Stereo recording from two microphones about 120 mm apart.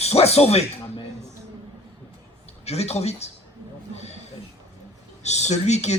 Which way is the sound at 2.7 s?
60° left (ahead or behind).